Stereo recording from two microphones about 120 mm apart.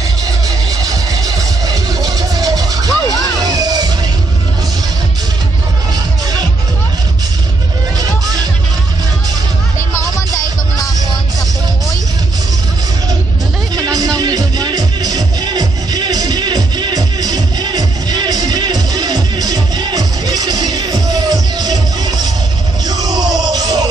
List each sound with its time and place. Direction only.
1.2 s music: 30° right (ahead or behind)
8.0 s music: 30° right (ahead or behind)
13.7 s music: 30° right (ahead or behind)